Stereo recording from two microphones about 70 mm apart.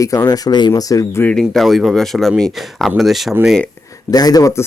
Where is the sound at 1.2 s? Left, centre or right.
Left.